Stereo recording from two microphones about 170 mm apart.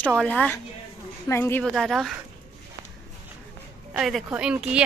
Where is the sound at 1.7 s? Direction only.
Centre (ahead or behind).